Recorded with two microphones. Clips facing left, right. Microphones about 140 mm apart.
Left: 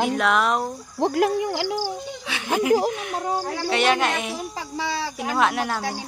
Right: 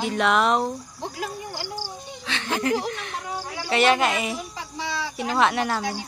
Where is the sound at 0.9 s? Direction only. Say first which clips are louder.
Left 12 dB; 65° left (ahead or behind); by 1.9 s 90° left.